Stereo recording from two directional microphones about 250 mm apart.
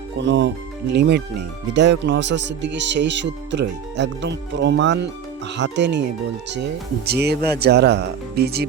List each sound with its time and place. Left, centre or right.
0.2 s speech: right